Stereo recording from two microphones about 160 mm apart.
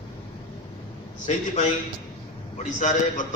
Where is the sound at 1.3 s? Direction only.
50° left (ahead or behind).